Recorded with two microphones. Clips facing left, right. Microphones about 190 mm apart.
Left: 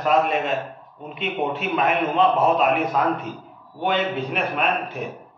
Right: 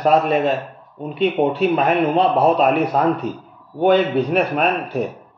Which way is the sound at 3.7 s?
40° right (ahead or behind).